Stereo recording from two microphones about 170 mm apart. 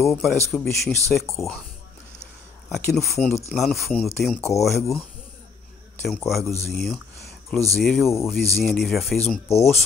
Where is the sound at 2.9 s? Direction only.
Centre (ahead or behind).